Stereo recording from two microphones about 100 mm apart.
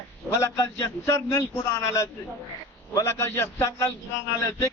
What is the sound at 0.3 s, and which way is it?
Speech, 30° left (ahead or behind).